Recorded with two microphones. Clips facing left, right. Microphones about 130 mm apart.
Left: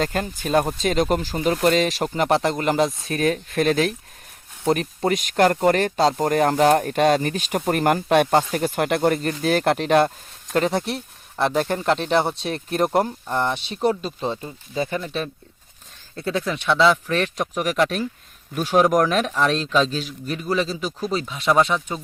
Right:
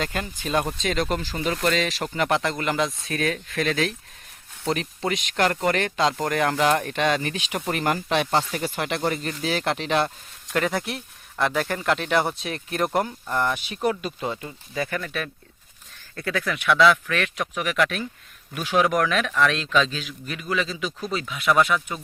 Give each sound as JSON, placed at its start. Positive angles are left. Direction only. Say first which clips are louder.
{"t": 0.0, "sound": "speech", "louder": "left 5 dB", "side_deg": 40}
{"t": 10.5, "sound": "speech", "louder": "left 4 dB", "side_deg": 25}